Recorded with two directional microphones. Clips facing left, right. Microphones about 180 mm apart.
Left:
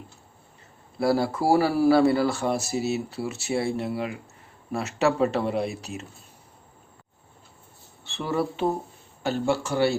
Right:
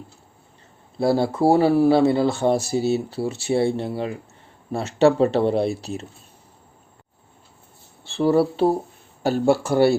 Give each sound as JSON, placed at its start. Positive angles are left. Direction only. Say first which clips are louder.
{"t": 0.9, "sound": "speech", "louder": "right 3 dB", "side_deg": -25}
{"t": 8.0, "sound": "speech", "louder": "right 9 dB", "side_deg": -30}
{"t": 9.2, "sound": "speech", "louder": "right 6 dB", "side_deg": -50}